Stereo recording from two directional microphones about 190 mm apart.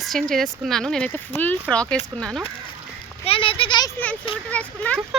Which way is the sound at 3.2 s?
30° left (ahead or behind).